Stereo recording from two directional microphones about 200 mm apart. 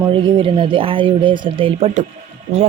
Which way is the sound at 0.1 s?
25° right (ahead or behind).